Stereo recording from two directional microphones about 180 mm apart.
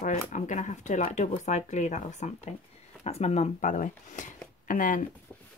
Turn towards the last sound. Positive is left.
turn(degrees=45)  # may be behind; listen again after turning